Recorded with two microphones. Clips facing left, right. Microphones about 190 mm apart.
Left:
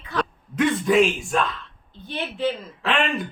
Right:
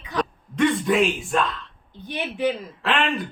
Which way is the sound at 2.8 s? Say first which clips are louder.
Left 1 dB; centre (ahead or behind).